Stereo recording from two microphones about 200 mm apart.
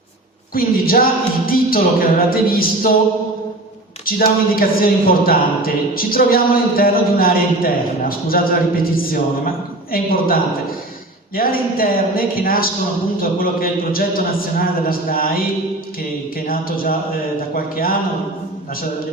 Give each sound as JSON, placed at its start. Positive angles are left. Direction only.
{"t": 0.5, "sound": "a woman's voice", "side_deg": 45}
{"t": 4.0, "sound": "a woman's voice", "side_deg": 45}
{"t": 16.5, "sound": "a woman's voice", "side_deg": 45}